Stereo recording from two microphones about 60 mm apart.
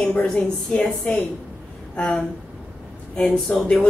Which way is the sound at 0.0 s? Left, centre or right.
Centre.